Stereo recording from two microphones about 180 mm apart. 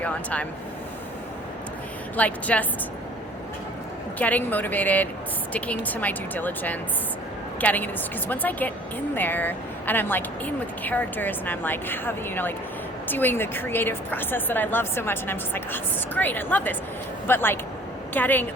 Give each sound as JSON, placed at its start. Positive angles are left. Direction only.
{"t": 0.0, "sound": "a woman's voice", "side_deg": 10}
{"t": 2.1, "sound": "a woman's voice", "side_deg": 10}
{"t": 4.2, "sound": "a woman's voice", "side_deg": 10}